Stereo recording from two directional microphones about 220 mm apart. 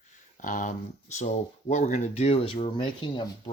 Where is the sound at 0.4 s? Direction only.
35° left (ahead or behind).